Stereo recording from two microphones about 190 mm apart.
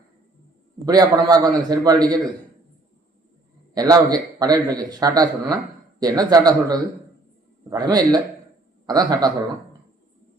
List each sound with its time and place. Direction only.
0.9 s a man's voice: 20° right (ahead or behind)
3.8 s a man's voice: 20° right (ahead or behind)